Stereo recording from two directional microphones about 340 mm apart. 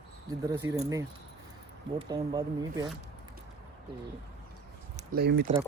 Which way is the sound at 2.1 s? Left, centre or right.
Centre.